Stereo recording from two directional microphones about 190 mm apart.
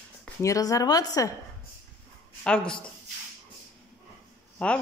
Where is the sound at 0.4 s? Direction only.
15° left (ahead or behind).